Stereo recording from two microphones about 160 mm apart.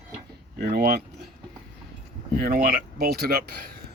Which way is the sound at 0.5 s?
70° right (ahead or behind).